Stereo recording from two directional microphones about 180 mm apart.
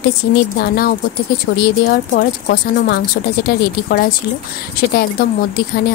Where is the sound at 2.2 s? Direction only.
60° left (ahead or behind).